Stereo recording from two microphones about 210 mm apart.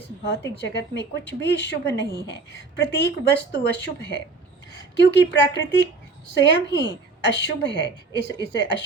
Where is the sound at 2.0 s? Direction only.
15° right (ahead or behind).